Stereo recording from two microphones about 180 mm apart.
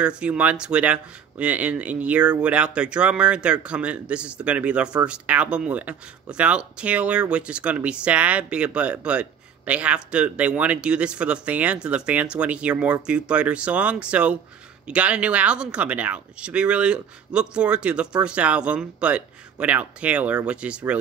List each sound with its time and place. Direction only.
0.0 s speech: 5° right (ahead or behind)